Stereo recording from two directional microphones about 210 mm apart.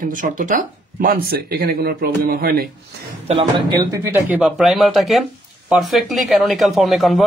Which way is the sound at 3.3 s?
25° right (ahead or behind).